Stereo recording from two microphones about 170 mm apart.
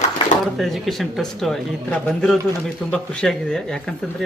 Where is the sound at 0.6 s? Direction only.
Centre (ahead or behind).